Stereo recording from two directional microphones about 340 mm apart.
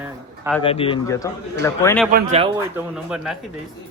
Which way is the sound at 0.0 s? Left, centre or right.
Centre.